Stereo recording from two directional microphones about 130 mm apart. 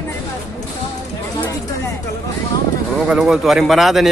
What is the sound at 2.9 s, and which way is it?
Speech, 5° right (ahead or behind).